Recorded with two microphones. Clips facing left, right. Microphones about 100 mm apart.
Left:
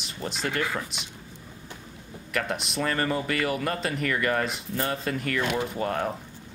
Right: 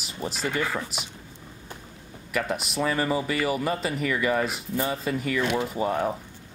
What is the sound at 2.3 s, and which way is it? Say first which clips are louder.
Speech: right 2 dB; 5° right (ahead or behind).